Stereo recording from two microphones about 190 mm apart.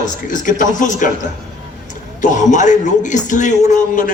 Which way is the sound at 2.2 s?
40° left (ahead or behind).